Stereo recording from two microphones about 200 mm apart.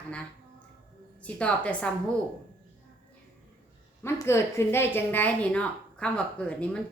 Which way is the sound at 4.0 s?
10° left (ahead or behind).